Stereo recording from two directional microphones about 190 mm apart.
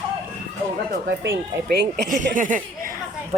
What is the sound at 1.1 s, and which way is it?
Speech, 60° right (ahead or behind).